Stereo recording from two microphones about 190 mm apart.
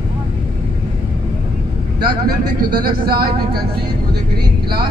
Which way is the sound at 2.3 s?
50° right (ahead or behind).